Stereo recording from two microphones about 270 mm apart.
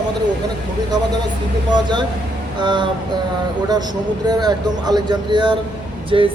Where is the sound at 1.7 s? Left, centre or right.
Centre.